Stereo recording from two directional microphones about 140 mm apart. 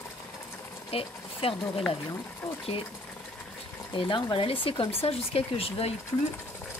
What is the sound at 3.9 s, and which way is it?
Speech, 40° left (ahead or behind).